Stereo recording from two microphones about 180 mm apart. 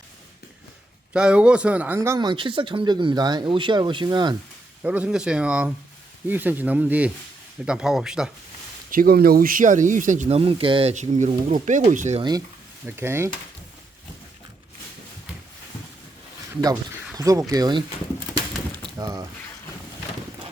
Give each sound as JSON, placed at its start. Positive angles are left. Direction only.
{"t": 1.1, "sound": "speech", "side_deg": -5}
{"t": 2.0, "sound": "speech", "side_deg": -20}
{"t": 4.8, "sound": "speech", "side_deg": -5}
{"t": 8.9, "sound": "speech", "side_deg": -55}
{"t": 13.0, "sound": "speech", "side_deg": -15}
{"t": 17.2, "sound": "speech", "side_deg": -20}
{"t": 18.9, "sound": "speech", "side_deg": -20}